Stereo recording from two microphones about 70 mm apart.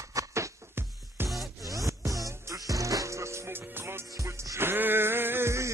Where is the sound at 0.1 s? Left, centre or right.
Right.